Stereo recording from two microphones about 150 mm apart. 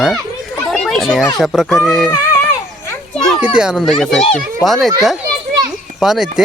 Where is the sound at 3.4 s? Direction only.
10° right (ahead or behind).